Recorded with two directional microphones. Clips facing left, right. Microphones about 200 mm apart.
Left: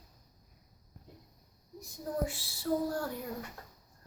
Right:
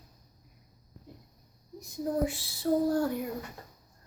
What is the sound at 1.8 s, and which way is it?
Speech, 20° right (ahead or behind).